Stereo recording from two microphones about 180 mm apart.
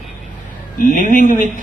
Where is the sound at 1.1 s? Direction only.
45° left (ahead or behind).